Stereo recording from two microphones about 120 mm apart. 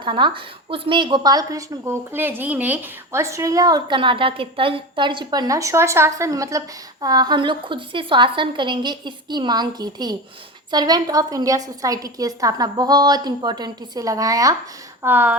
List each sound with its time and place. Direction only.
0.0 s a woman's voice: 45° right (ahead or behind); by 2.0 s 30° right (ahead or behind)
2.1 s a woman's voice: 15° right (ahead or behind)
15.0 s speech: 15° right (ahead or behind)